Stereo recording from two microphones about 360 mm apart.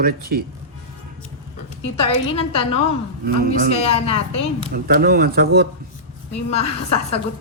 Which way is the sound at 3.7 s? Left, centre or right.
Centre.